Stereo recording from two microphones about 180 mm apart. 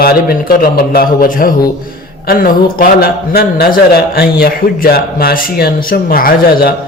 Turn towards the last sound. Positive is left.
turn(degrees=55)  # may be behind; listen again after turning